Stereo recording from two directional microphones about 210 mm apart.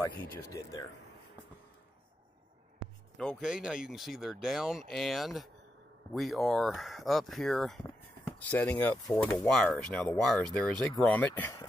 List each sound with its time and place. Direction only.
0.5 s speech: 15° left (ahead or behind)
3.2 s speech: centre (ahead or behind)
9.5 s speech: 5° left (ahead or behind)